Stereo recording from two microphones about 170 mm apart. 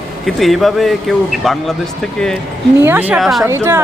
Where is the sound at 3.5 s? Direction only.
15° right (ahead or behind).